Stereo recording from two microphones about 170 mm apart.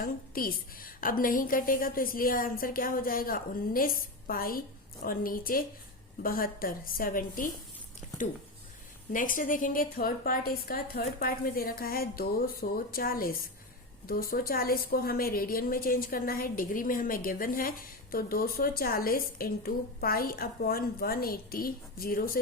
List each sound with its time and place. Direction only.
0.0 s a woman's voice: 60° left (ahead or behind)
9.1 s a woman's voice: 50° left (ahead or behind)